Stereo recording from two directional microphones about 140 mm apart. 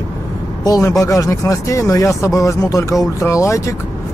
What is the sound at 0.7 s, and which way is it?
Speech, 25° left (ahead or behind).